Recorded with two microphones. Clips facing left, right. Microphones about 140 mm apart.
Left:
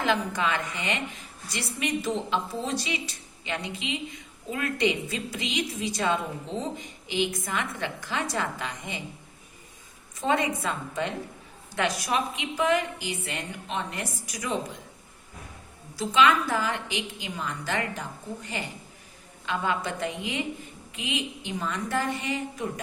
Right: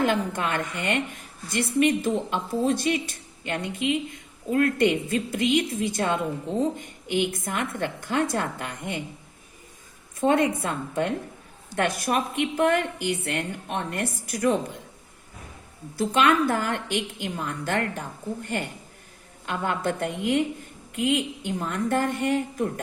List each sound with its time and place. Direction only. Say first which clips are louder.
0.0 s a woman's voice: right 2 dB; 55° right (ahead or behind)
10.2 s a woman's voice: right 5 dB; 55° right (ahead or behind)
16.0 s a woman's voice: right 1 dB; 55° right (ahead or behind)